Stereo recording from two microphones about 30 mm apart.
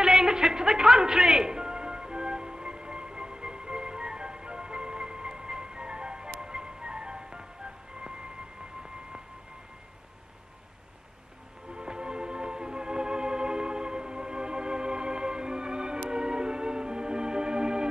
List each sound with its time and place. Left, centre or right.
0.0 s music: right
11.7 s music: right